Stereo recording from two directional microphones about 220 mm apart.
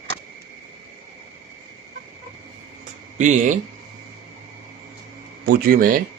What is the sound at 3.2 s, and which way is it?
Speech, 35° right (ahead or behind).